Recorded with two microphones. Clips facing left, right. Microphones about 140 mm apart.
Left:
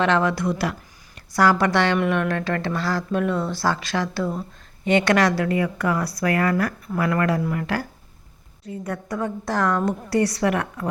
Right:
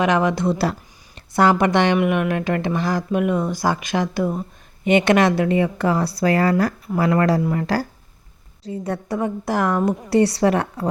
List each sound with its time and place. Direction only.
0.0 s a woman's voice: 15° right (ahead or behind)